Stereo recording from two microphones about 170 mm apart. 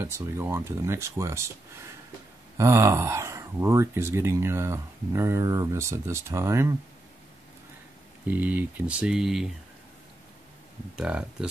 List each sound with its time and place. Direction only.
0.0 s speech: 15° right (ahead or behind)
2.5 s speech: 15° right (ahead or behind)
8.3 s speech: 10° right (ahead or behind)
11.0 s speech: 5° right (ahead or behind)